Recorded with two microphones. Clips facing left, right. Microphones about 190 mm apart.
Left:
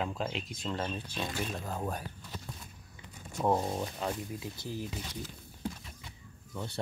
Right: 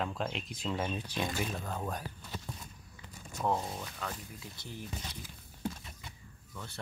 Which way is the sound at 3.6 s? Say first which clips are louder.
Left 6 dB; 30° left (ahead or behind).